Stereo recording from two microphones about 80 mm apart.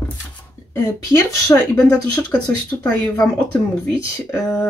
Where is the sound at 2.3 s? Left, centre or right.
Centre.